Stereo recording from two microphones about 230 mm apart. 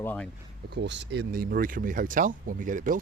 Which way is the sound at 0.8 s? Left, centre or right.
Right.